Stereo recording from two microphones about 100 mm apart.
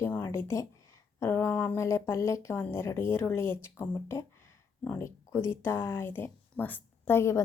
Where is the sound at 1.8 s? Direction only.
30° left (ahead or behind).